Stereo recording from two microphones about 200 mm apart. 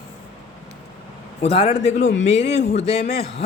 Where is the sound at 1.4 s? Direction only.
30° left (ahead or behind).